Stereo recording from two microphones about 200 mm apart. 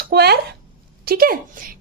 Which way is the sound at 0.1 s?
55° right (ahead or behind).